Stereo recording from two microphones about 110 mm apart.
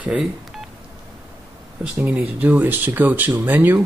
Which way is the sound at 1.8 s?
15° right (ahead or behind).